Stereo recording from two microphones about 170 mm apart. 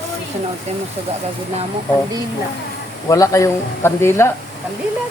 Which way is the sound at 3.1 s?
20° left (ahead or behind).